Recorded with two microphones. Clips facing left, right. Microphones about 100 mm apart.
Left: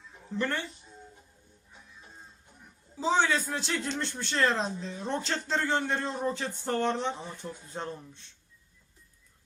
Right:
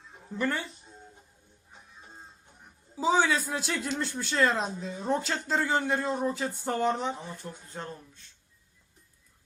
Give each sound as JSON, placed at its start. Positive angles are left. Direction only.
{"t": 0.3, "sound": "speech", "side_deg": -5}
{"t": 1.7, "sound": "music", "side_deg": -30}
{"t": 2.9, "sound": "speech", "side_deg": -5}
{"t": 7.6, "sound": "speech", "side_deg": 20}